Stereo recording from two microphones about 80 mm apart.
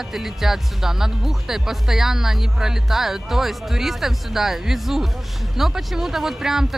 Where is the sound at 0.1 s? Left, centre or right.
Centre.